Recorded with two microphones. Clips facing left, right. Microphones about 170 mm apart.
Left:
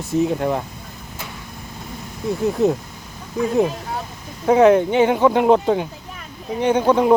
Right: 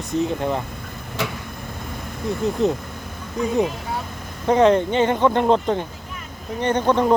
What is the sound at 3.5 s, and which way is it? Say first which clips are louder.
Speech: left 2 dB; centre (ahead or behind).